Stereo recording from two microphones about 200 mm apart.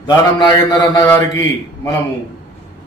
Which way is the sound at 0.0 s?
20° left (ahead or behind).